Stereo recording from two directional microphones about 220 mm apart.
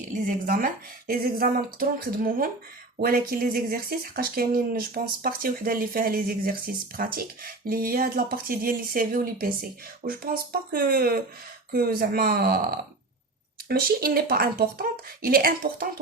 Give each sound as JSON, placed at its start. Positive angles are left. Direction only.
{"t": 0.4, "sound": "speech", "side_deg": -40}